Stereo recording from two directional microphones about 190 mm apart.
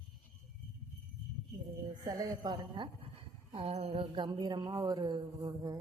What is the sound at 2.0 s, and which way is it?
Speech, 20° right (ahead or behind).